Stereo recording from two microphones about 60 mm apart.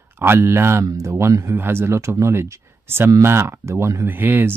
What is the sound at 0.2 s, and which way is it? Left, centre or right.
Speech, right.